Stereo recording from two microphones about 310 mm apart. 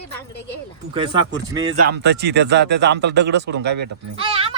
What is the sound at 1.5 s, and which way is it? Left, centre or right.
Speech, right.